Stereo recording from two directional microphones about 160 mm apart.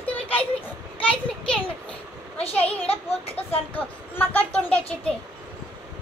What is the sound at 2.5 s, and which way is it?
Speech, 10° left (ahead or behind).